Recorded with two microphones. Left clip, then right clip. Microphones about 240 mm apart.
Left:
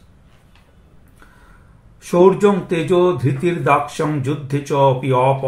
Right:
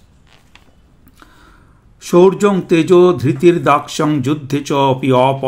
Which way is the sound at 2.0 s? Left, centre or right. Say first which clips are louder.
Right 2 dB; right.